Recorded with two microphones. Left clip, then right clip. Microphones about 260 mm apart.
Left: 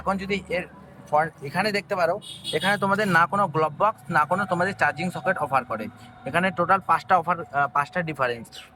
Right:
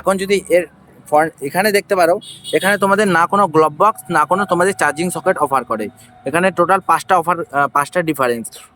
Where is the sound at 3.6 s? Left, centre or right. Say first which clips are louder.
Right 10 dB; right.